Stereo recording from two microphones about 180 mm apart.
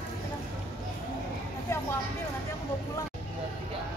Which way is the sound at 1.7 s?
15° left (ahead or behind).